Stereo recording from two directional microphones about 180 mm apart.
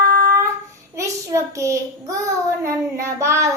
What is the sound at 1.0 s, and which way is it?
Child singing, 15° right (ahead or behind).